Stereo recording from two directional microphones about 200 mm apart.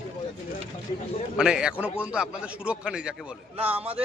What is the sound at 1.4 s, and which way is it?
Speech, 5° right (ahead or behind).